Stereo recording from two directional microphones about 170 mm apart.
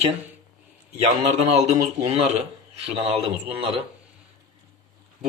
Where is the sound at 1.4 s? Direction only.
40° right (ahead or behind).